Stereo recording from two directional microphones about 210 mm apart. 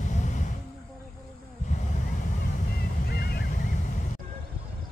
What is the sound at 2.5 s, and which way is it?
Boat, 45° left (ahead or behind).